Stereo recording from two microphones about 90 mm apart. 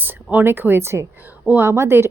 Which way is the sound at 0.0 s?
20° right (ahead or behind).